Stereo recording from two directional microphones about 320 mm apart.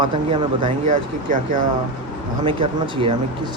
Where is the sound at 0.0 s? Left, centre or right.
Centre.